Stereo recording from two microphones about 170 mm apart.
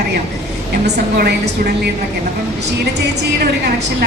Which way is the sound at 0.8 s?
80° right.